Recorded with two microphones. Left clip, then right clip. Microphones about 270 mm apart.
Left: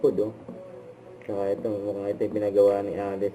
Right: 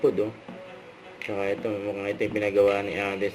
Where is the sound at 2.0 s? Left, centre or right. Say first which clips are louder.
Even; right.